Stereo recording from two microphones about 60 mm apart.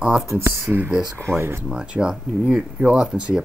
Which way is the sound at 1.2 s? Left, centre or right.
Right.